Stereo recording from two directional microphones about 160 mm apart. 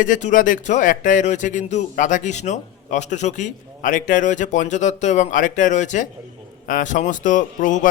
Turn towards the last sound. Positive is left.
turn(degrees=55)  # may be behind; listen again after turning